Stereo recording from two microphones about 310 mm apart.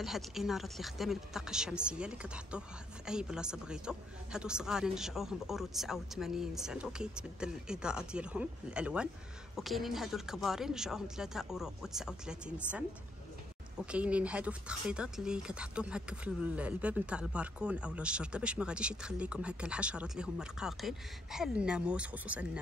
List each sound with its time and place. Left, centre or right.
0.0 s speech: centre
13.9 s speech: centre